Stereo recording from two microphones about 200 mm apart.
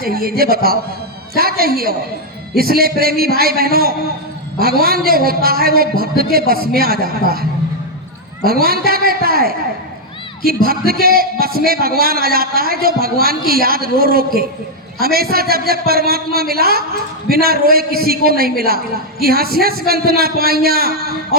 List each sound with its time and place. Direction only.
0.0 s a woman's voice: 50° right (ahead or behind)
8.4 s a woman's voice: 50° right (ahead or behind)